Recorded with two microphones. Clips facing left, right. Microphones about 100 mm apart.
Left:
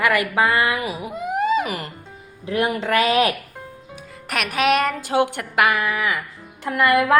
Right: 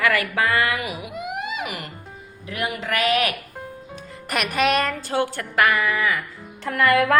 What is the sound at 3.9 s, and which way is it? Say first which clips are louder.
Speech: even; 5° left (ahead or behind).